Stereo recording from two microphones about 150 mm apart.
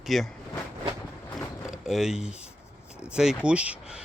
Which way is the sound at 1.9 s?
5° right (ahead or behind).